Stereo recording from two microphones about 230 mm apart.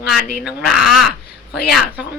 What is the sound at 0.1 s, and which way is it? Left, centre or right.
Speech, centre.